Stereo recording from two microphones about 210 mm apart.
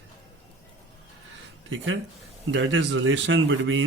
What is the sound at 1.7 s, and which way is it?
Speech, 65° right (ahead or behind).